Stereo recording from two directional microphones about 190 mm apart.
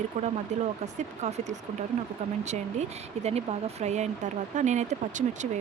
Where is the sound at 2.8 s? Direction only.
35° right (ahead or behind).